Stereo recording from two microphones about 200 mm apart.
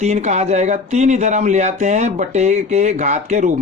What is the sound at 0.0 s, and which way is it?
Speech, 35° right (ahead or behind).